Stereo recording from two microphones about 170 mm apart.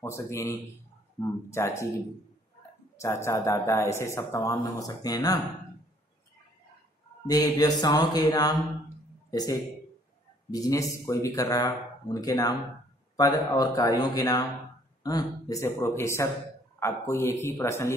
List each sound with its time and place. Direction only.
0.0 s speech: 15° left (ahead or behind)
3.0 s speech: 15° left (ahead or behind)
7.2 s speech: 20° left (ahead or behind)